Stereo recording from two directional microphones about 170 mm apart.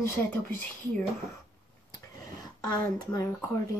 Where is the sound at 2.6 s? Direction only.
25° left (ahead or behind).